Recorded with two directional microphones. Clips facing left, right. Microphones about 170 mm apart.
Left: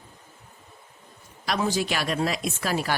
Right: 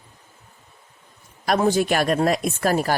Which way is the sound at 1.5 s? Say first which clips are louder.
Right 7 dB; 50° right (ahead or behind).